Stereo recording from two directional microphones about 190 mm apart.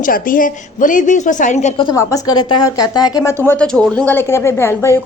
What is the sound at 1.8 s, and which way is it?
Speech, 20° left (ahead or behind).